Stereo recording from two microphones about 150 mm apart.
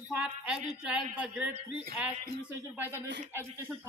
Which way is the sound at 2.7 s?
15° right (ahead or behind).